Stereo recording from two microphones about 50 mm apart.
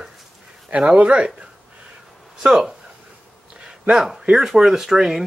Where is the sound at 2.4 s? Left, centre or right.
Centre.